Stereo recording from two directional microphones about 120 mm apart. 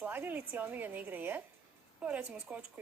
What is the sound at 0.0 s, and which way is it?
A woman's voice, 15° right (ahead or behind).